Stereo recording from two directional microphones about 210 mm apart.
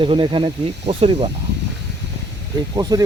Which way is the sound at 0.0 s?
25° right (ahead or behind).